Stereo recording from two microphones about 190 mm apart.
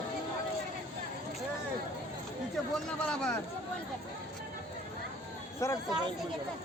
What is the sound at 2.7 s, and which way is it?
Speech, 5° left (ahead or behind).